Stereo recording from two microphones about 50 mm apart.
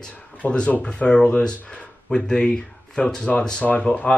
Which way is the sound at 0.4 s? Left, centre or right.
Left.